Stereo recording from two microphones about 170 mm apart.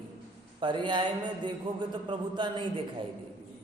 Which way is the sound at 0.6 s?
30° right (ahead or behind).